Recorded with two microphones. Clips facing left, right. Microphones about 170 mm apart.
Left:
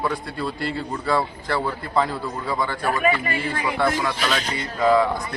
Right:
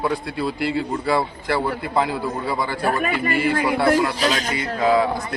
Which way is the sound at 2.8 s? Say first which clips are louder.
Even; 40° right (ahead or behind).